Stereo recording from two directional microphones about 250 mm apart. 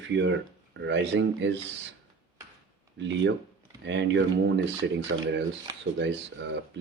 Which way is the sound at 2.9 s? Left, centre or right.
Right.